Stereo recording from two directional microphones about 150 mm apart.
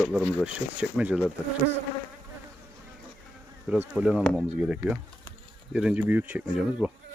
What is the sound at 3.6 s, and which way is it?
Speech, 5° right (ahead or behind).